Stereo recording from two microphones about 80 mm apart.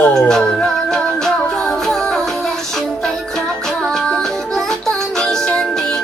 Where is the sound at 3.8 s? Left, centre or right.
Centre.